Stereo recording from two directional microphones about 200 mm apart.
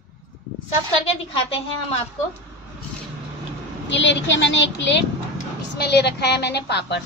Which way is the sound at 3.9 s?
65° left (ahead or behind).